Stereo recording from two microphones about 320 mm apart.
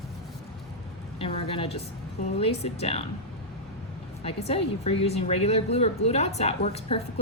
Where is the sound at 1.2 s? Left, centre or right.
Centre.